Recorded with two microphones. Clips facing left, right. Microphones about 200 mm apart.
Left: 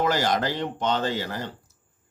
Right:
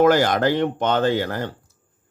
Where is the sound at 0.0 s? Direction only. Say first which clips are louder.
Right 7 dB; 60° right (ahead or behind).